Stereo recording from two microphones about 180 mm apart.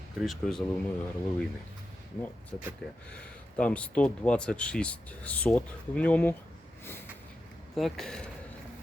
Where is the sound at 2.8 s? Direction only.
65° left (ahead or behind).